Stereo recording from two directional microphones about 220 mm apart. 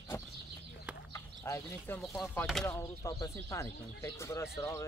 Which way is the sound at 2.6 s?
15° left (ahead or behind).